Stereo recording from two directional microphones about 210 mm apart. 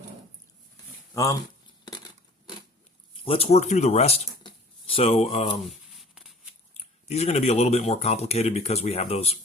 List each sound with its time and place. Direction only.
1.1 s speech: 15° left (ahead or behind)
3.2 s speech: 25° left (ahead or behind)
5.9 s a sound: centre (ahead or behind)
6.7 s speech: 30° left (ahead or behind)